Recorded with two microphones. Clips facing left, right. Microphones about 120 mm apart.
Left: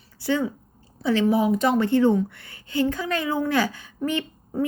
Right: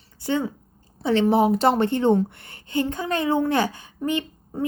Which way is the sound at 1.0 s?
25° right (ahead or behind).